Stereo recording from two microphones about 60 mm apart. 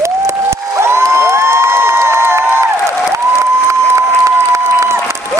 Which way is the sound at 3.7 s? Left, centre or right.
Right.